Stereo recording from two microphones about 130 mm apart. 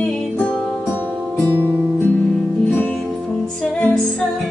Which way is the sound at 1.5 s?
20° right (ahead or behind).